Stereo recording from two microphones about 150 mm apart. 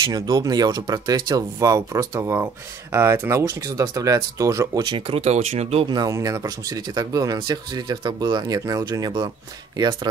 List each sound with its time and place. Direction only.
0.1 s speech: 25° right (ahead or behind); by 5.9 s 45° right (ahead or behind)
5.9 s speech: 25° right (ahead or behind)